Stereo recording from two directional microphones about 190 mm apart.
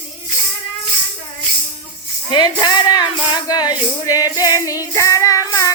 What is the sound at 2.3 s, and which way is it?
Speech, 20° left (ahead or behind).